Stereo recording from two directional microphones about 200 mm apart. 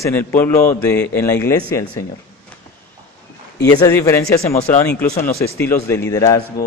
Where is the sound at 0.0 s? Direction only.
10° left (ahead or behind).